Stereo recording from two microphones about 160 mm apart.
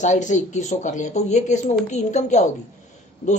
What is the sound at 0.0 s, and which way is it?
Speech, 50° left (ahead or behind).